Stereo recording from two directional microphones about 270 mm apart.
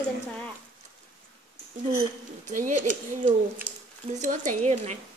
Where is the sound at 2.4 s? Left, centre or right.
Right.